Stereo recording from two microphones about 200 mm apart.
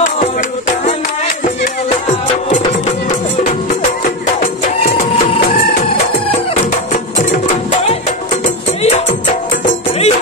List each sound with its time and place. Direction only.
0.2 s music: 40° left (ahead or behind)
8.8 s music: 35° left (ahead or behind)